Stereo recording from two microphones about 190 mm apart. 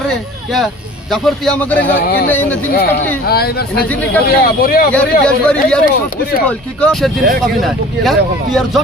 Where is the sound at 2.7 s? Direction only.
55° left (ahead or behind).